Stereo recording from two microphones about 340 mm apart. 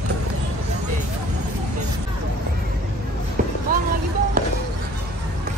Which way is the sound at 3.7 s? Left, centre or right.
Right.